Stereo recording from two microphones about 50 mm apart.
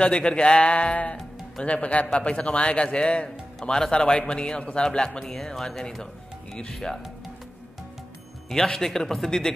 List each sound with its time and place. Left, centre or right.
0.0 s a man's voice: centre
8.5 s a man's voice: centre